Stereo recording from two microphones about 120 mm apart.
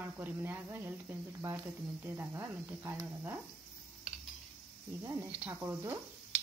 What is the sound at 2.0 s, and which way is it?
Speech, 20° right (ahead or behind).